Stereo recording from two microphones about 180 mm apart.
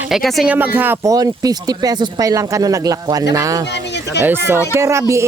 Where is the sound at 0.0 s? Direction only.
Centre (ahead or behind); by 3.7 s 20° right (ahead or behind).